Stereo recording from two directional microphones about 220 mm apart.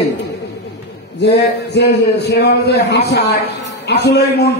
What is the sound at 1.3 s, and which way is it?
A man's voice, 50° left (ahead or behind).